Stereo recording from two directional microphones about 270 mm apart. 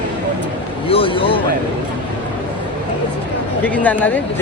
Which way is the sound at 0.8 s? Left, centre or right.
Centre.